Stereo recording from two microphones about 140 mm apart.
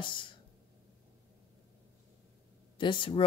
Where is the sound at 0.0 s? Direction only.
35° left (ahead or behind).